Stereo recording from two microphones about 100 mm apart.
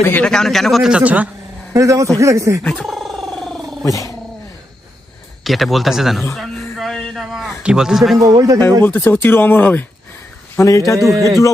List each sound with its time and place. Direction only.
0.0 s speech: 20° left (ahead or behind)
0.3 s speech: 5° left (ahead or behind); by 1.3 s 15° right (ahead or behind)
1.7 s speech: 35° right (ahead or behind)
2.6 s purr: 5° left (ahead or behind)
3.8 s a man's voice: 35° left (ahead or behind)
5.4 s speech: centre (ahead or behind)
6.3 s a sound: centre (ahead or behind)
8.2 s speech: 35° right (ahead or behind)
8.8 s speech: 20° left (ahead or behind)
10.6 s a man's voice: 30° left (ahead or behind)